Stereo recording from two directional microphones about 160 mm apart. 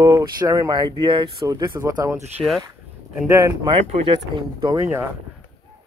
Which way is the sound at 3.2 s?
20° right (ahead or behind).